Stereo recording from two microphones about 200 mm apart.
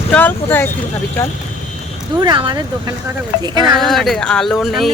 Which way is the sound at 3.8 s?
Centre (ahead or behind).